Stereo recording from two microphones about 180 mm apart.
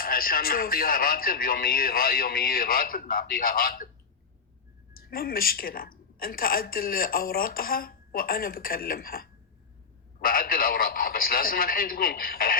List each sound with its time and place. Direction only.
0.0 s a woman's voice: 55° left (ahead or behind)
4.9 s a woman's voice: 55° left (ahead or behind)